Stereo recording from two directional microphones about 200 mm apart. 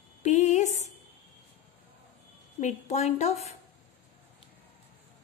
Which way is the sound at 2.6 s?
35° left (ahead or behind).